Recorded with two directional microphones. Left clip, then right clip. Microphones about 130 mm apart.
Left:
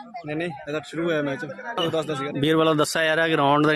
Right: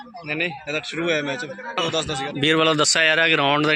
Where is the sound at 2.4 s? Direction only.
25° left (ahead or behind).